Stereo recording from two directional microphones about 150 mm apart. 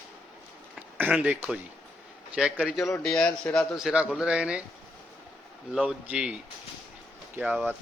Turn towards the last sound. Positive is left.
turn(degrees=-10)  # may be behind; listen again after turning